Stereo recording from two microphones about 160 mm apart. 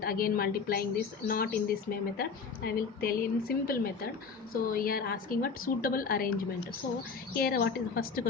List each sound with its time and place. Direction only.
0.0 s a woman's voice: 65° left (ahead or behind)